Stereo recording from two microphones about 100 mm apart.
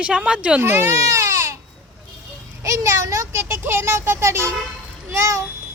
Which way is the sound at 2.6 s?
30° right (ahead or behind).